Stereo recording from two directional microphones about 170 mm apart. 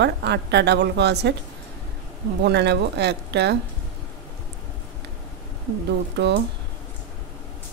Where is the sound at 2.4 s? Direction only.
85° right.